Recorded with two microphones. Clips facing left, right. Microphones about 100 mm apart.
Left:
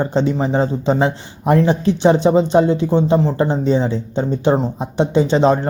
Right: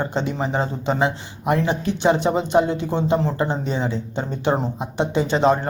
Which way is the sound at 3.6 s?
30° left (ahead or behind).